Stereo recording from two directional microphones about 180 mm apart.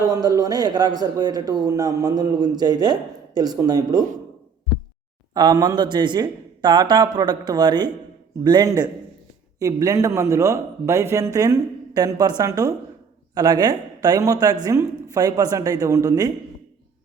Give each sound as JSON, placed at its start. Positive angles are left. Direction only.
{"t": 0.0, "sound": "speech", "side_deg": -20}
{"t": 5.3, "sound": "a man's voice", "side_deg": -20}